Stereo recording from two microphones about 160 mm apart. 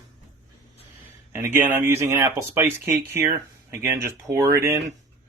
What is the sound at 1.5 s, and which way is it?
Speech, 15° right (ahead or behind).